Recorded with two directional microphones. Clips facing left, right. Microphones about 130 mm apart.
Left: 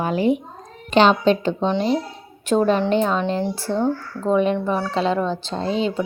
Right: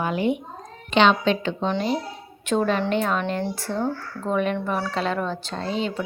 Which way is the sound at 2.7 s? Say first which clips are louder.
Left 4 dB; 35° left (ahead or behind).